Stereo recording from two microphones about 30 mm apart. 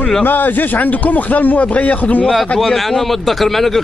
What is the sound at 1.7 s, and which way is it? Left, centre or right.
Speech, left.